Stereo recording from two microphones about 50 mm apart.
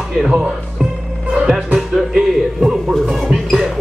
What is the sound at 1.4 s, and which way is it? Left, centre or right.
Music, centre.